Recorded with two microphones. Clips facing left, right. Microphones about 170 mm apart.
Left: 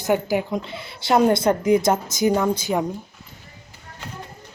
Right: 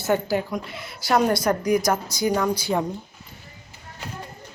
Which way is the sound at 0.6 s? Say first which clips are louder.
Left 2 dB; 25° left (ahead or behind).